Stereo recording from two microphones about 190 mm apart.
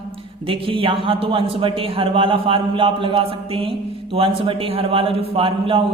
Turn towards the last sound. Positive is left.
turn(degrees=-30)  # may be behind; listen again after turning